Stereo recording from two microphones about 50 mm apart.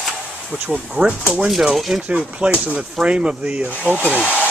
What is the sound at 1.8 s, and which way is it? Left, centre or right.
Speech, centre.